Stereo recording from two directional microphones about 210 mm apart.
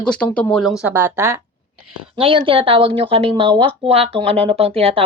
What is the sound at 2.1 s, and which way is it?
Speech, 25° right (ahead or behind).